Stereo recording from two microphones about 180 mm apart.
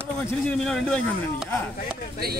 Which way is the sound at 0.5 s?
5° left (ahead or behind).